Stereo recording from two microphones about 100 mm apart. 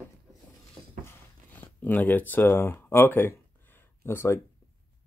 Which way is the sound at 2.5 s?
20° left (ahead or behind).